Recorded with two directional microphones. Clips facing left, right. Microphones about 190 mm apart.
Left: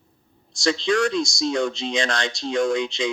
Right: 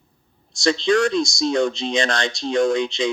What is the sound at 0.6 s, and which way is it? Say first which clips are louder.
Speech: right 3 dB; 30° right (ahead or behind).